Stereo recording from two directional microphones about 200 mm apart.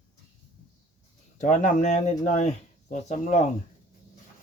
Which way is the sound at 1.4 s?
40° left (ahead or behind).